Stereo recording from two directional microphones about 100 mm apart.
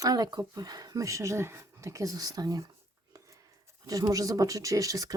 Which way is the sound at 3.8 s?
35° right (ahead or behind).